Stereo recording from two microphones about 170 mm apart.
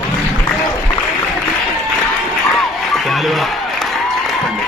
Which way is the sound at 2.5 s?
Centre (ahead or behind).